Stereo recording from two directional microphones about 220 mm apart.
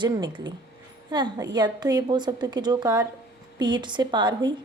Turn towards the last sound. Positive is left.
turn(degrees=-20)  # may be behind; listen again after turning